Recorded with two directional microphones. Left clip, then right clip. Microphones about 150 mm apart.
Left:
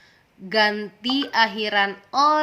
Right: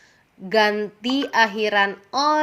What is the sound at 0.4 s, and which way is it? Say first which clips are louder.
A woman's voice: right 2 dB; 30° right (ahead or behind).